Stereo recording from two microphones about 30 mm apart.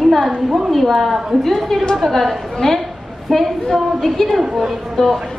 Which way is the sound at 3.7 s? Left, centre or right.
Centre.